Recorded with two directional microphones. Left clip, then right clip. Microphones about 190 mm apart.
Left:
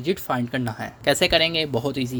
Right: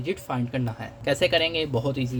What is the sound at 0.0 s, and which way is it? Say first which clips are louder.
Speech: left 5 dB; 40° left (ahead or behind).